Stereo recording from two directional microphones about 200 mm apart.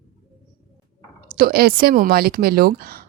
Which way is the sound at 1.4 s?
50° right (ahead or behind).